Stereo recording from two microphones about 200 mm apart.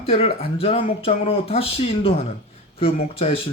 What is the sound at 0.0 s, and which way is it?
Speech, 30° left (ahead or behind).